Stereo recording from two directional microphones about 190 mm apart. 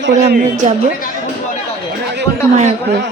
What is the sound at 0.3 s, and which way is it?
Speech, 50° right (ahead or behind).